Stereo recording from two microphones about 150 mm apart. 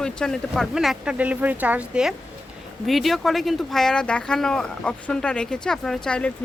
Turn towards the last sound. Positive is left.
turn(degrees=5)  # may be behind; listen again after turning